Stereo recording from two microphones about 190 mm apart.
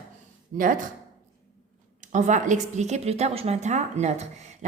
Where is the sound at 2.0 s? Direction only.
40° right (ahead or behind).